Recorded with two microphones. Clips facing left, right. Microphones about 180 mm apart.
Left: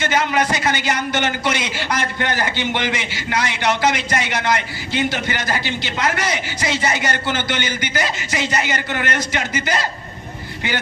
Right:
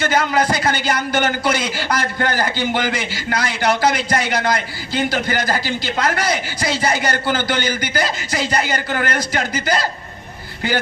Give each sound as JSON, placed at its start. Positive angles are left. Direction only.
{"t": 0.0, "sound": "a man's voice", "side_deg": -35}